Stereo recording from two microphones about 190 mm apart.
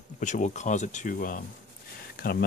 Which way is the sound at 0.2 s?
40° left (ahead or behind).